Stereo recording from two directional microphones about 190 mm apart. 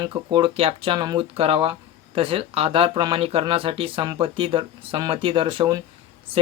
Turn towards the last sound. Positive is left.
turn(degrees=-30)  # may be behind; listen again after turning